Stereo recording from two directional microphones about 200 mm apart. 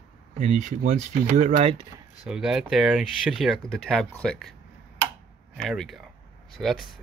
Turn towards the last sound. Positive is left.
turn(degrees=0)  # may be behind; listen again after turning